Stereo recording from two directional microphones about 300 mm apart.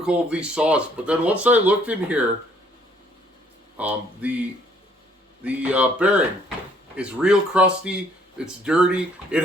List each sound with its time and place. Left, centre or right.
0.0 s speech: centre
3.8 s speech: centre
5.4 s speech: centre